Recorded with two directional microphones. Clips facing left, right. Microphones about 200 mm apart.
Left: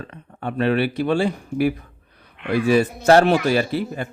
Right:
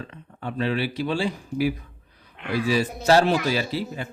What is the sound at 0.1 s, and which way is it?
A man's voice, 60° left (ahead or behind).